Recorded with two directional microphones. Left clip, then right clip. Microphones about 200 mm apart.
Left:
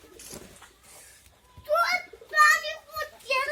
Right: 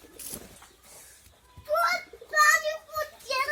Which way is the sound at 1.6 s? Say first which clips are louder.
Left 1 dB; 30° left (ahead or behind).